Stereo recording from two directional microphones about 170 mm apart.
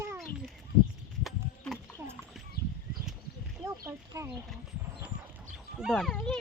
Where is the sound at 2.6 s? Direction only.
65° left (ahead or behind).